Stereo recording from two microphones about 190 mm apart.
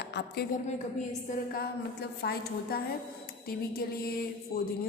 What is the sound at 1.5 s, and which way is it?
A woman's voice, 55° left (ahead or behind).